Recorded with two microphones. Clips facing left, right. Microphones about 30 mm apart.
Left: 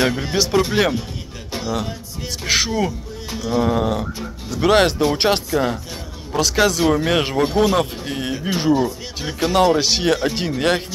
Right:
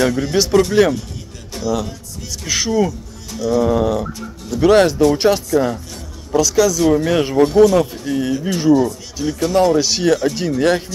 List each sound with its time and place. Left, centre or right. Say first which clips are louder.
0.0 s speech: right 3 dB; left
1.5 s music: right 3 dB; left
2.8 s speech: right 4 dB; left
4.8 s a man's voice: right 4 dB; left
6.8 s speech: right 3 dB; left